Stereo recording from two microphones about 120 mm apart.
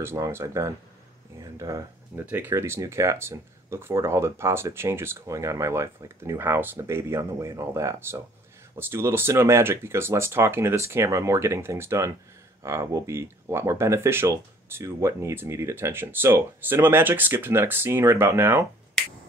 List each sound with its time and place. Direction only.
0.0 s speech: 20° right (ahead or behind)
1.4 s a sound: 30° right (ahead or behind)
2.2 s speech: 15° right (ahead or behind)